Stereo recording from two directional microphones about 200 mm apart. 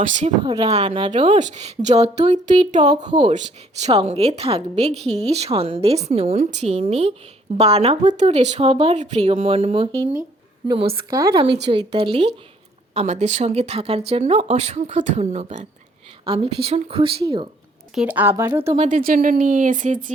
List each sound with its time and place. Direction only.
0.0 s a woman's voice: 40° right (ahead or behind)
3.1 s a woman's voice: 25° right (ahead or behind)
11.1 s speech: 15° right (ahead or behind)
11.9 s a woman's voice: 30° right (ahead or behind)
17.9 s speech: 5° right (ahead or behind)
18.8 s a woman's voice: 45° right (ahead or behind)